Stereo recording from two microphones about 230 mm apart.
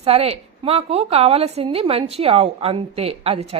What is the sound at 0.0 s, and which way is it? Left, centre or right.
A woman's voice, right.